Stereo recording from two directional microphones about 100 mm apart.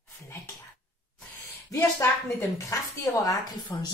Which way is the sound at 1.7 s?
30° left (ahead or behind).